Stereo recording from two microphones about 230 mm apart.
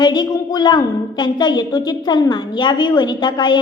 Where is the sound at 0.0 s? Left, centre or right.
Centre.